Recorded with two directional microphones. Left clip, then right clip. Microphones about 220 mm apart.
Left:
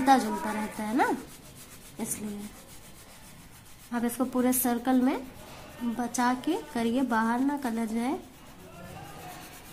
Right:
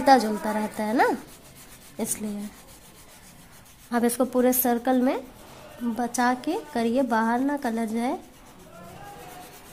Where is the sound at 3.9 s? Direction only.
35° right (ahead or behind).